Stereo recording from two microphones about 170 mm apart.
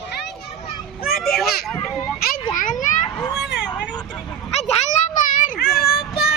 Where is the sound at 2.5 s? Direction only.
50° left (ahead or behind).